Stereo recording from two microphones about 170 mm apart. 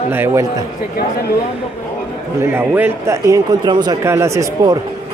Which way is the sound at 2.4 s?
10° right (ahead or behind).